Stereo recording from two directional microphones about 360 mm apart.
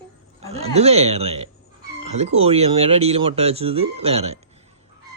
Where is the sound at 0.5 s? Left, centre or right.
Centre.